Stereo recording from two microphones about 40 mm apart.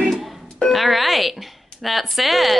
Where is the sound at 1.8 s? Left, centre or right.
Centre.